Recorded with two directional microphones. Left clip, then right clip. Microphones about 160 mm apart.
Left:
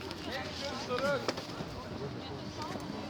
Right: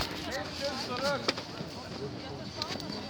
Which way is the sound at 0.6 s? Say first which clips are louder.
Right 1 dB; 50° right (ahead or behind).